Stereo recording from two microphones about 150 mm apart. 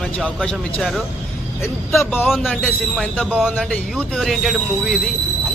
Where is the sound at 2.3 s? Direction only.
Centre (ahead or behind).